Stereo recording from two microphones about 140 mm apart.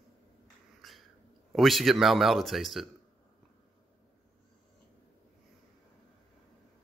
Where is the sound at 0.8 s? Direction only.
Centre (ahead or behind).